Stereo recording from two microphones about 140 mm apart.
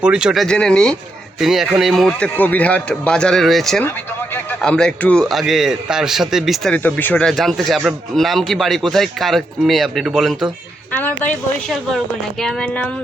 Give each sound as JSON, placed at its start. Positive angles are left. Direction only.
{"t": 0.0, "sound": "a man's voice", "side_deg": -5}
{"t": 0.4, "sound": "a man's voice", "side_deg": 5}
{"t": 3.8, "sound": "speech", "side_deg": 15}
{"t": 4.6, "sound": "a man's voice", "side_deg": 5}
{"t": 10.9, "sound": "speech", "side_deg": 15}
{"t": 11.7, "sound": "a man's voice", "side_deg": 0}